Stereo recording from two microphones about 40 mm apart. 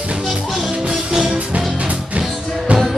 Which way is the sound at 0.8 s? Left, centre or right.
Centre.